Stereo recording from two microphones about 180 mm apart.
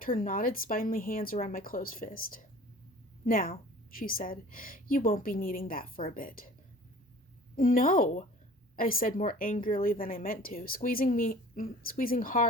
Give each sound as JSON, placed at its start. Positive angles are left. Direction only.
{"t": 0.0, "sound": "speech", "side_deg": 50}
{"t": 7.5, "sound": "speech", "side_deg": 50}